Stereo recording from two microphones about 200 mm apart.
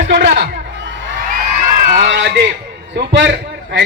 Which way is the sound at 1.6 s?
40° right (ahead or behind).